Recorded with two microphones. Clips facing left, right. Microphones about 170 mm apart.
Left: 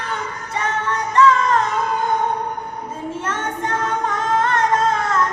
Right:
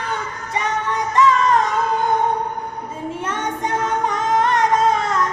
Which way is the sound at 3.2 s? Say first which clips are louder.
Right 1 dB; 15° right (ahead or behind).